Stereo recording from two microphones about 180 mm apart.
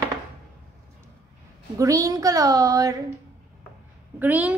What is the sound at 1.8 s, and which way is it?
A woman's voice, 20° right (ahead or behind).